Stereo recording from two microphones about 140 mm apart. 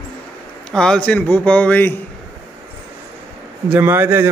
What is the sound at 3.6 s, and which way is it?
Speech, 15° right (ahead or behind).